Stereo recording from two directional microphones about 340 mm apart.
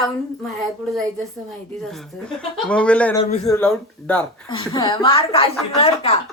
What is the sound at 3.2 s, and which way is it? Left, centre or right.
Speech, centre.